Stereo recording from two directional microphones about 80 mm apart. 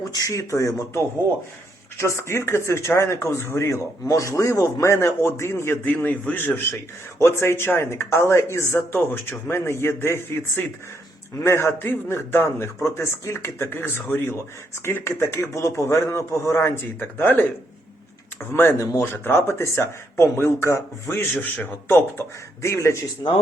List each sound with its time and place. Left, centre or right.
0.1 s a man's voice: left
18.5 s a man's voice: left
22.6 s a man's voice: left